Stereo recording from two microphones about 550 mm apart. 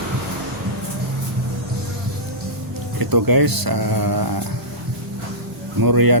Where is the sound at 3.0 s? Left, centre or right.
Right.